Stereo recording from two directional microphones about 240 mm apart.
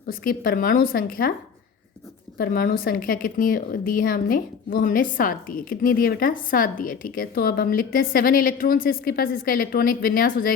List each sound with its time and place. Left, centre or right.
0.1 s speech: left
2.4 s speech: left